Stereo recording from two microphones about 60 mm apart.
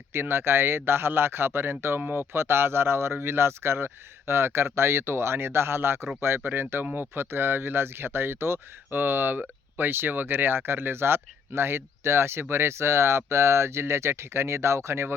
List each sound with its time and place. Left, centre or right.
0.1 s speech: right